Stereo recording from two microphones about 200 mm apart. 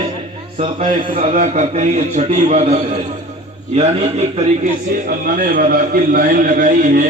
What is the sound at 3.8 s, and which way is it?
Speech, 35° right (ahead or behind).